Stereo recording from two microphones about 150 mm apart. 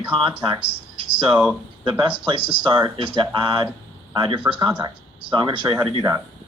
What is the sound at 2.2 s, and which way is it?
Speech, 30° right (ahead or behind).